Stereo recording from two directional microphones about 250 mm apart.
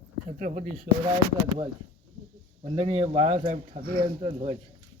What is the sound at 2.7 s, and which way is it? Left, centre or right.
A man's voice, right.